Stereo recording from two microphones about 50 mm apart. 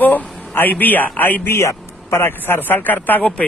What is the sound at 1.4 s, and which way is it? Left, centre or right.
Speech, left.